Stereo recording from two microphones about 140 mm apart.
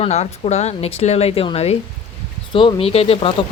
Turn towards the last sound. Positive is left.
turn(degrees=45)  # may be behind; listen again after turning